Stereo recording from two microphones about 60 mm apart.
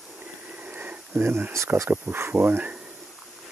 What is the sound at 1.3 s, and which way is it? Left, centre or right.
Speech, right.